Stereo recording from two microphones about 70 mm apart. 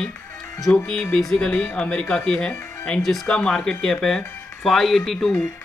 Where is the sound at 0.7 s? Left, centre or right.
Left.